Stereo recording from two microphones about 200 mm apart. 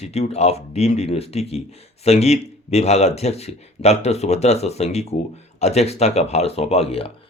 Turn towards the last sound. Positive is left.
turn(degrees=30)  # may be behind; listen again after turning